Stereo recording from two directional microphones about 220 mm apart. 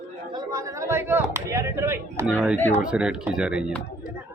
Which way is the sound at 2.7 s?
5° right (ahead or behind).